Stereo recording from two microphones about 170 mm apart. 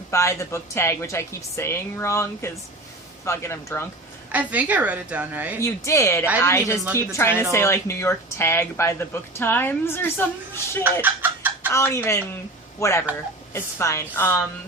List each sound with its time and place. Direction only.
0.1 s speech: 15° left (ahead or behind)
4.3 s a woman's voice: 10° right (ahead or behind)
5.6 s speech: 15° left (ahead or behind)
11.0 s chicken: 10° right (ahead or behind)
11.7 s speech: 15° left (ahead or behind)